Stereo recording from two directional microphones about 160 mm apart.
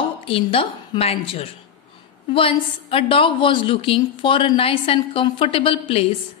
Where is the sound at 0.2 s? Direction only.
35° left (ahead or behind).